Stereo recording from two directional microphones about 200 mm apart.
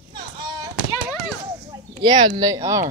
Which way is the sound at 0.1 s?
20° right (ahead or behind).